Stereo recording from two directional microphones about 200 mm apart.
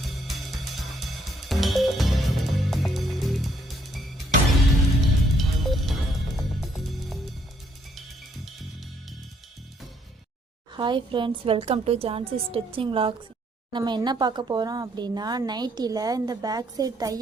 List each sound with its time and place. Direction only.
0.0 s music: centre (ahead or behind)
10.8 s a woman's voice: 25° right (ahead or behind)